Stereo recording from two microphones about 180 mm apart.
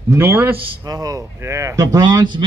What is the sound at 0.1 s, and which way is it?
Speech, 15° right (ahead or behind).